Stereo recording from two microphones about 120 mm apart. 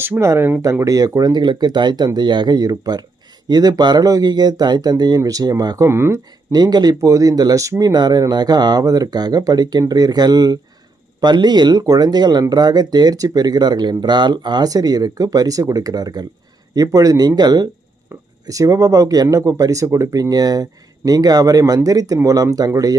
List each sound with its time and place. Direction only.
0.0 s speech: 20° right (ahead or behind)
6.5 s speech: 35° right (ahead or behind)
18.1 s a sound: 20° right (ahead or behind)
18.4 s speech: 30° right (ahead or behind)